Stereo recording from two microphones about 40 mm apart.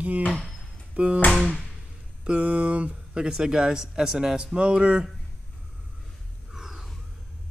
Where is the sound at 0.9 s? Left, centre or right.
Right.